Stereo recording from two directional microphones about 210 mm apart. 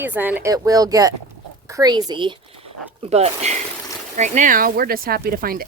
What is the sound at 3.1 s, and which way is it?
Speech, 30° right (ahead or behind).